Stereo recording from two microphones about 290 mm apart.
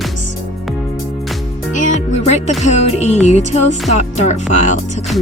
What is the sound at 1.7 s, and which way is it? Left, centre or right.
Music, left.